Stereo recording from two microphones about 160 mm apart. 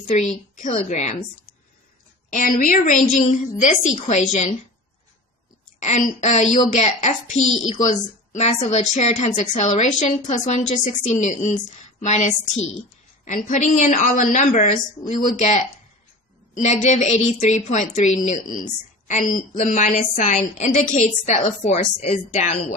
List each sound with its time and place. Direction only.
0.5 s a woman's voice: 50° left (ahead or behind)
2.3 s a woman's voice: 55° left (ahead or behind)
5.8 s a woman's voice: 45° left (ahead or behind)
16.6 s a woman's voice: 45° left (ahead or behind)